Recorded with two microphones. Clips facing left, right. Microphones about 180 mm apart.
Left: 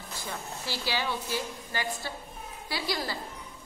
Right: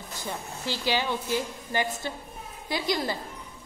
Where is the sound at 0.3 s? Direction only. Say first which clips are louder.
Right 4 dB; 20° right (ahead or behind).